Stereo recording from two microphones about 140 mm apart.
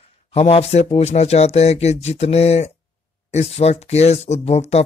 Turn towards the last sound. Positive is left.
turn(degrees=50)  # may be behind; listen again after turning